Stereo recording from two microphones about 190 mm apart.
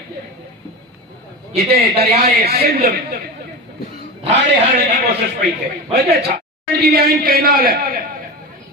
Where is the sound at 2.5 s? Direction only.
55° right (ahead or behind).